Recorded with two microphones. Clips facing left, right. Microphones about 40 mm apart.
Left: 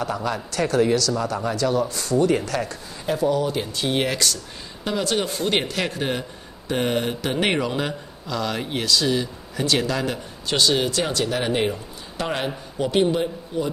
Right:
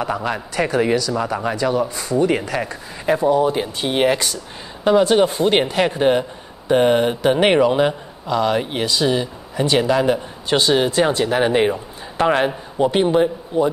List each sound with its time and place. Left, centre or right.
0.0 s speech: right
3.1 s a man's voice: right